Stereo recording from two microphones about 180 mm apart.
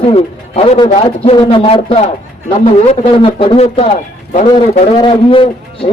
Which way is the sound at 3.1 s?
30° left (ahead or behind).